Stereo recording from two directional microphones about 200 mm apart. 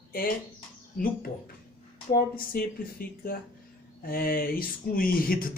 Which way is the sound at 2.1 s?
45° left (ahead or behind).